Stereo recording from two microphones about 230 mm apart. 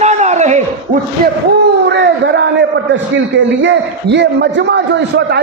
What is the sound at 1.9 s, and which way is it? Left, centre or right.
A man's voice, right.